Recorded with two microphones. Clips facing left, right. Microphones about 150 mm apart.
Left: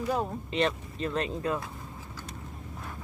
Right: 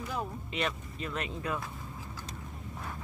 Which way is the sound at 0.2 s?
30° left (ahead or behind).